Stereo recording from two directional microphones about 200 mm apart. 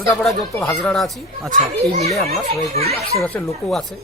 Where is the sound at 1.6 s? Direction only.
30° right (ahead or behind).